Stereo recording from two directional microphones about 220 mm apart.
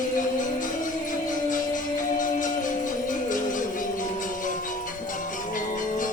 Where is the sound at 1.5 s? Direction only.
35° left (ahead or behind).